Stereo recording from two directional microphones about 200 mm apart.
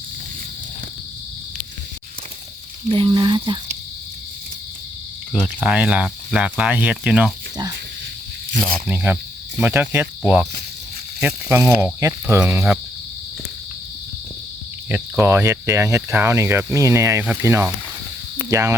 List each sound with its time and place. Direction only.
2.9 s speech: 25° right (ahead or behind)
5.3 s speech: centre (ahead or behind)
8.9 s speech: 10° right (ahead or behind)
14.8 s speech: 10° right (ahead or behind)